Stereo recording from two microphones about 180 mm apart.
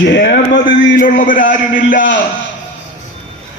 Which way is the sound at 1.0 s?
45° left (ahead or behind).